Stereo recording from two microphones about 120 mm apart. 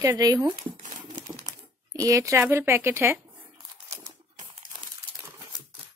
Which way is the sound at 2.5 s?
20° right (ahead or behind).